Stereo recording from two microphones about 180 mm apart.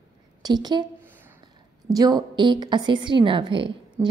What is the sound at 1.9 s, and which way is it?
A woman's voice, 20° right (ahead or behind).